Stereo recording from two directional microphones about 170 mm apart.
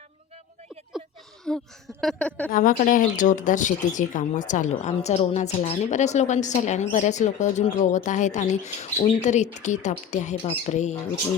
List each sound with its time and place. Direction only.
1.5 s a woman's voice: 5° left (ahead or behind)
2.5 s speech: 50° left (ahead or behind)